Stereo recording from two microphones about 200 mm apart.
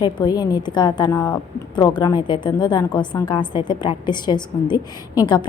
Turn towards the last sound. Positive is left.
turn(degrees=20)  # may be behind; listen again after turning